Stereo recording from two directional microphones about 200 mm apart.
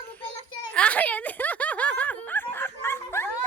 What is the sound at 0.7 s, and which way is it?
Snicker, 5° left (ahead or behind).